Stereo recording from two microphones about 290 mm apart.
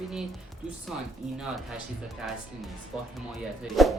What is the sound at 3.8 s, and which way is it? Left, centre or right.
Speech, centre.